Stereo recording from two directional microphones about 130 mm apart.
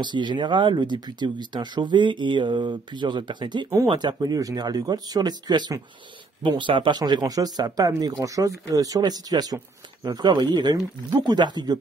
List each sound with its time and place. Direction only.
0.0 s speech: 35° right (ahead or behind)